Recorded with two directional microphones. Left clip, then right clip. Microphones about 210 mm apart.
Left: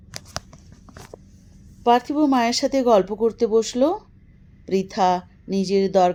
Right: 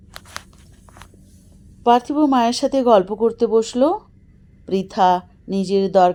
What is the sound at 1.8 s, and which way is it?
A woman's voice, 15° right (ahead or behind).